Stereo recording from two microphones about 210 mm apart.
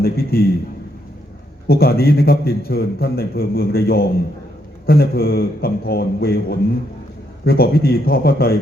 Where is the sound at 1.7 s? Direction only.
45° left (ahead or behind).